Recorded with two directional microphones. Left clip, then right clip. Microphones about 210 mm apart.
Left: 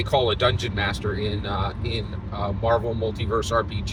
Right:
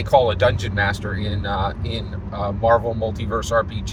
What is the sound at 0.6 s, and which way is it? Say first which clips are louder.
Speech: right 4 dB; 10° left (ahead or behind).